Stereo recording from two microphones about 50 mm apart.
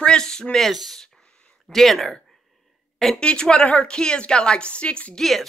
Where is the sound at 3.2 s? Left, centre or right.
Centre.